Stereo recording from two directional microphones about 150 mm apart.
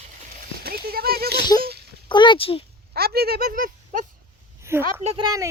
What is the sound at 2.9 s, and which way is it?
Speech, 90° right.